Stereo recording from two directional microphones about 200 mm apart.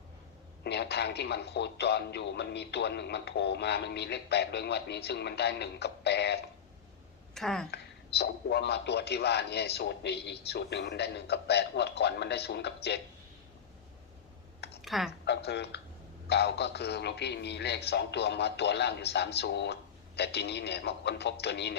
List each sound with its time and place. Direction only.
0.6 s speech: 55° left (ahead or behind)
7.3 s a woman's voice: centre (ahead or behind)
7.7 s speech: 55° left (ahead or behind)
14.8 s typing: centre (ahead or behind)
15.2 s speech: 55° left (ahead or behind)